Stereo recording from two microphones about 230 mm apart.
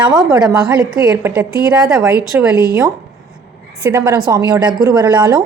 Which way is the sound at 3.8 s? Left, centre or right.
Centre.